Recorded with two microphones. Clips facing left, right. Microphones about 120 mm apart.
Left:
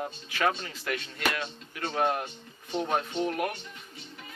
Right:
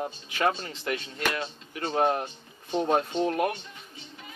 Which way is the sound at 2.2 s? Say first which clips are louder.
Right 1 dB; 20° right (ahead or behind).